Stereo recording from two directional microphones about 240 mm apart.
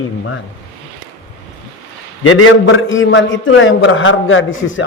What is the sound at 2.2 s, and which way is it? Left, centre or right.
A man's voice, left.